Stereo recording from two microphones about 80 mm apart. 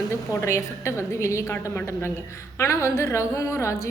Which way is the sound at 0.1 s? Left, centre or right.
Left.